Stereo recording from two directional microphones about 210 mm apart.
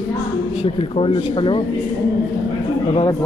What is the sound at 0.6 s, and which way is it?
Speech, 25° left (ahead or behind).